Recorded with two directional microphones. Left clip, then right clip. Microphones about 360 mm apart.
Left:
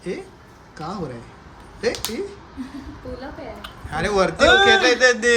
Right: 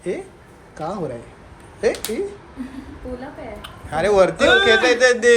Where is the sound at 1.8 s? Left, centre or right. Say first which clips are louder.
Right 3 dB; centre.